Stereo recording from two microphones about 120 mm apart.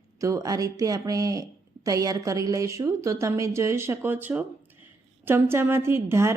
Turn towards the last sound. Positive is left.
turn(degrees=-20)  # may be behind; listen again after turning